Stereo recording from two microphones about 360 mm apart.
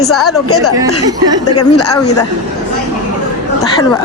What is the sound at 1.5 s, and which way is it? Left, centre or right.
Speech, left.